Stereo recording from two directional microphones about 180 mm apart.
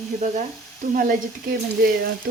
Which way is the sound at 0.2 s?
45° right (ahead or behind).